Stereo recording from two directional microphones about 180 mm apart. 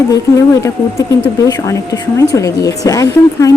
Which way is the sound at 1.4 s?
20° left (ahead or behind).